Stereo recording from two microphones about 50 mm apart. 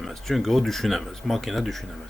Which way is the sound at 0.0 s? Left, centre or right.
Centre.